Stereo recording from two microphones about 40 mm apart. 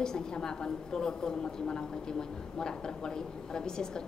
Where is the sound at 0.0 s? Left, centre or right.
Centre.